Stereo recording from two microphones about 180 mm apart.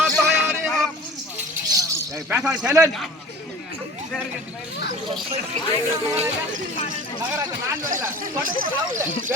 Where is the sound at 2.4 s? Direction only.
5° right (ahead or behind).